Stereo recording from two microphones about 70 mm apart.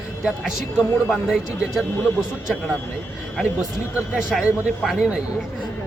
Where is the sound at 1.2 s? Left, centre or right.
Centre.